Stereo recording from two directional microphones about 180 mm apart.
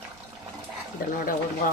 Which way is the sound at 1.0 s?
55° left (ahead or behind).